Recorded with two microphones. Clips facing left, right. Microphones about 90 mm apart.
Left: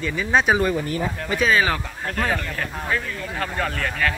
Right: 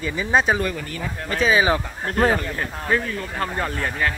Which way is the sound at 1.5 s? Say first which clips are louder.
Right 2 dB; 20° right (ahead or behind).